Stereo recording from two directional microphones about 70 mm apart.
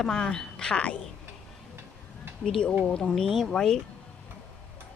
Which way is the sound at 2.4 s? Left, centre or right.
Centre.